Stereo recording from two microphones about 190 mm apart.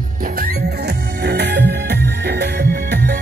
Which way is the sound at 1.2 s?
60° right (ahead or behind).